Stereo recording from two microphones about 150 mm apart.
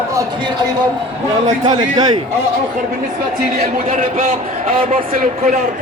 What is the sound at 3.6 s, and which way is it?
A man's voice, 60° right (ahead or behind).